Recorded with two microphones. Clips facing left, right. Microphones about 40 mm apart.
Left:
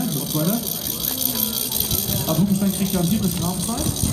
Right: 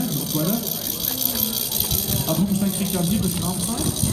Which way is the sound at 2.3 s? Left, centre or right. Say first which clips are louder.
Left 2 dB; centre.